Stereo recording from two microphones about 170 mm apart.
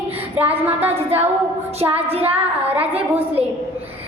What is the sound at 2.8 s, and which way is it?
Speech, 35° right (ahead or behind).